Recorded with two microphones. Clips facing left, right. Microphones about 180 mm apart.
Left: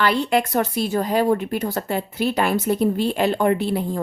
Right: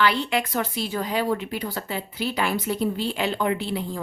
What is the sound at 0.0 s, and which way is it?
Speech, 45° left (ahead or behind).